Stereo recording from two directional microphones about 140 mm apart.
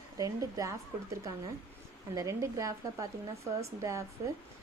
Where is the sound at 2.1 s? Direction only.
25° right (ahead or behind).